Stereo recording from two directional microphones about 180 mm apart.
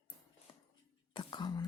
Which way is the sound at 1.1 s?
25° left (ahead or behind).